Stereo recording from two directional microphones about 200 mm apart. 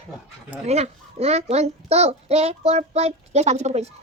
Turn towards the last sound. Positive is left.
turn(degrees=-35)  # may be behind; listen again after turning